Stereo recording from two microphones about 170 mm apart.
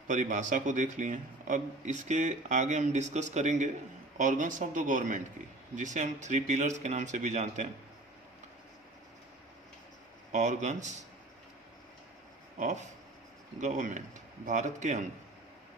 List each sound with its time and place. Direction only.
0.1 s a man's voice: 45° right (ahead or behind)
10.3 s a man's voice: 45° right (ahead or behind)
12.5 s a man's voice: 45° right (ahead or behind)